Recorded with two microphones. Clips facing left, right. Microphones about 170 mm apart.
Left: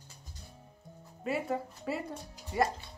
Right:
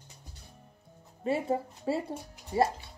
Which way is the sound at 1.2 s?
30° right (ahead or behind).